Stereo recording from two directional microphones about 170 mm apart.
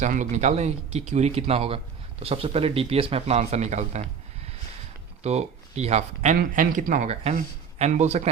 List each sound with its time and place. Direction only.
0.0 s speech: 45° right (ahead or behind)
5.2 s speech: 40° right (ahead or behind)
6.3 s a man's voice: 55° right (ahead or behind)